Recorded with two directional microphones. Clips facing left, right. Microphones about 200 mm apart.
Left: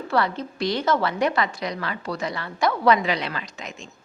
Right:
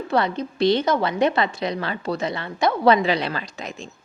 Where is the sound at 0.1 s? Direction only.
20° right (ahead or behind).